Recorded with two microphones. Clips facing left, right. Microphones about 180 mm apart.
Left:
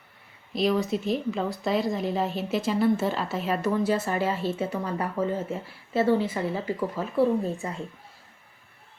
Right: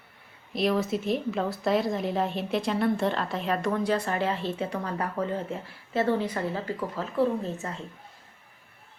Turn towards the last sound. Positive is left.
turn(degrees=10)  # may be behind; listen again after turning